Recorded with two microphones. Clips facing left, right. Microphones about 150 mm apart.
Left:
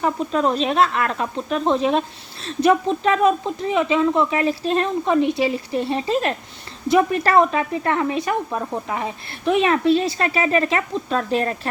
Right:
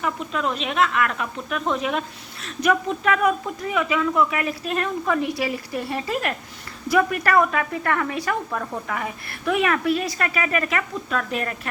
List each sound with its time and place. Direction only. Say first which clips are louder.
0.0 s speech: left 6 dB; 35° left (ahead or behind)